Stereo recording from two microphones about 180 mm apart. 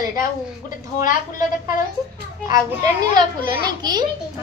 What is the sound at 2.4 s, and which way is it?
A woman's voice, 20° right (ahead or behind).